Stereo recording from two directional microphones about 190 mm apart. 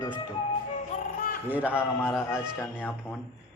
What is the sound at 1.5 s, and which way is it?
Speech, 10° right (ahead or behind).